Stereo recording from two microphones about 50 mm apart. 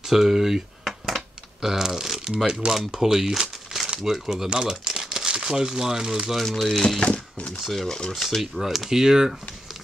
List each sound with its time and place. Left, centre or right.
0.0 s typing: centre
2.9 s speech: centre
6.3 s speech: centre
6.7 s speech: centre
7.1 s speech: left
7.5 s speech: centre
8.4 s speech: centre